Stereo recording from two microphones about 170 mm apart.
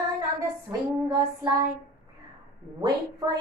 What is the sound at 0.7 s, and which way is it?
Child singing, 20° right (ahead or behind).